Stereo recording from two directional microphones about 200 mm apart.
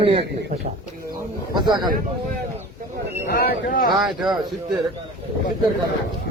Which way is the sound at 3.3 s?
50° left (ahead or behind).